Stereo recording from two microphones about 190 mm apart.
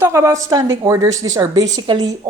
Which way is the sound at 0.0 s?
15° right (ahead or behind).